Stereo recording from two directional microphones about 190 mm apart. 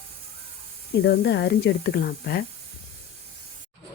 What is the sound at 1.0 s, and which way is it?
Speech, 60° left (ahead or behind).